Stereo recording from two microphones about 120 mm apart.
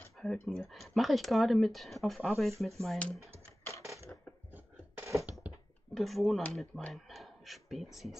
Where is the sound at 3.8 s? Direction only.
25° right (ahead or behind).